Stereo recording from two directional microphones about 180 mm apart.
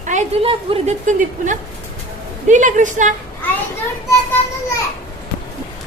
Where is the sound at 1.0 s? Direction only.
45° right (ahead or behind).